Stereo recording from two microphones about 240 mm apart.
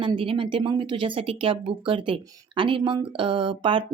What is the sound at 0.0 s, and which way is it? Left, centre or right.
Speech, right.